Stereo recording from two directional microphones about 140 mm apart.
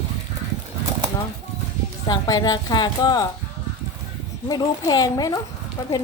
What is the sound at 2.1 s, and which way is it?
A woman's voice, 25° left (ahead or behind).